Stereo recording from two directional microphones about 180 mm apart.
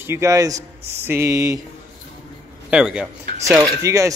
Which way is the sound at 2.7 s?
5° right (ahead or behind).